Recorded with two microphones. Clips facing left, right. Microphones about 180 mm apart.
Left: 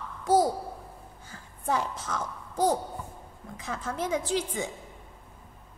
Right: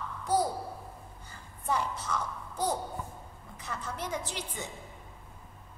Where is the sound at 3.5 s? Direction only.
90° left.